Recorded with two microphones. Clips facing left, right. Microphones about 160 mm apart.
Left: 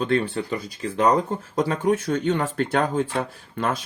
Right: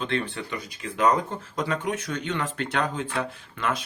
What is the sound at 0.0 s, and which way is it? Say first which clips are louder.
Speech: left 6 dB; 35° left (ahead or behind).